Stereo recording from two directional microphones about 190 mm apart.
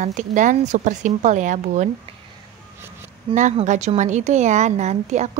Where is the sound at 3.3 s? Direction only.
40° right (ahead or behind).